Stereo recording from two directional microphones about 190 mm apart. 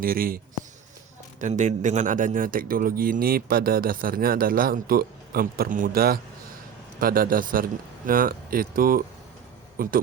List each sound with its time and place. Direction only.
0.0 s a man's voice: 50° right (ahead or behind)
1.4 s a man's voice: 40° right (ahead or behind)